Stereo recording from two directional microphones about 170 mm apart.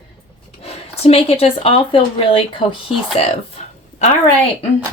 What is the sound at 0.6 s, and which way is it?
Speech, 35° left (ahead or behind).